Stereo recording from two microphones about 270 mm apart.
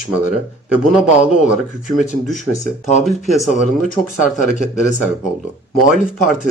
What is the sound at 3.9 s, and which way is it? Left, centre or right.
Speech, left.